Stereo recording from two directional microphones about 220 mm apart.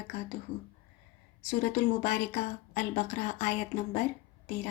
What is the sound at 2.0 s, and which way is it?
A woman's voice, 30° left (ahead or behind).